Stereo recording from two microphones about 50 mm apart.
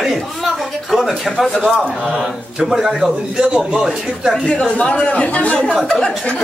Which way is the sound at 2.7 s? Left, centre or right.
Centre.